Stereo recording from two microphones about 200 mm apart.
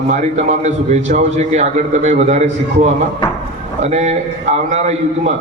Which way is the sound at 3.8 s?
35° right (ahead or behind).